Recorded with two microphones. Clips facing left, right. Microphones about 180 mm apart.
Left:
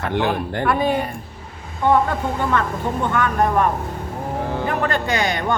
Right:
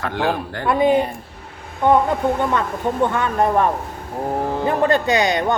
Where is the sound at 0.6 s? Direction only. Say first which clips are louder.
Right 4 dB; 20° right (ahead or behind).